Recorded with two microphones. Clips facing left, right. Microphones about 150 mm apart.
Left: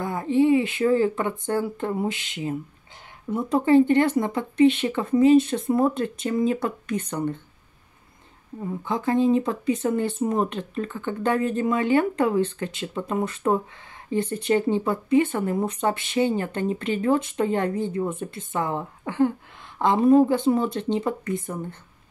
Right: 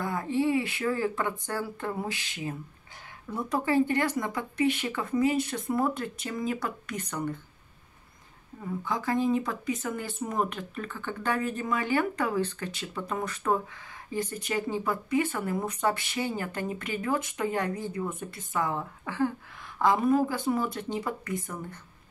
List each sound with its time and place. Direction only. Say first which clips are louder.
0.0 s speech: left 7 dB; 20° left (ahead or behind)
8.6 s speech: left 5 dB; 25° left (ahead or behind)